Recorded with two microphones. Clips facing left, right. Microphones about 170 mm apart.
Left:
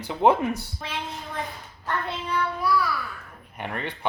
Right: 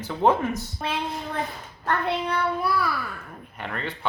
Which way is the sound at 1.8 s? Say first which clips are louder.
Right 5 dB; 65° right (ahead or behind).